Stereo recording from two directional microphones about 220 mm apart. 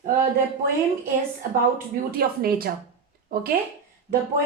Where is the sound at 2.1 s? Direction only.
45° right (ahead or behind).